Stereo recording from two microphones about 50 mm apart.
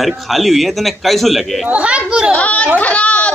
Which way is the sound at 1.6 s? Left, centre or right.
Right.